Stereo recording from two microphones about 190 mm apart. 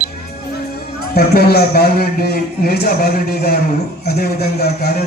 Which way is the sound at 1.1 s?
55° left (ahead or behind).